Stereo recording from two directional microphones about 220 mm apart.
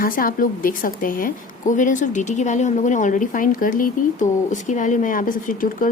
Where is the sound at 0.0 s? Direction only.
40° left (ahead or behind).